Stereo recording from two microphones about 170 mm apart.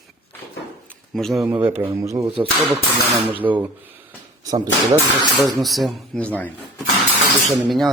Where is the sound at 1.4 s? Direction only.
15° right (ahead or behind).